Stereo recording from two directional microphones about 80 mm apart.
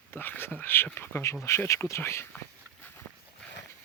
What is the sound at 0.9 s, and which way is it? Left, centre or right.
Speech, left.